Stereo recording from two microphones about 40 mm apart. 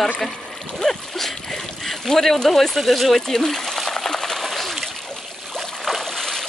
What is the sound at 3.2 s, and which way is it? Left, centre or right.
Speech, centre.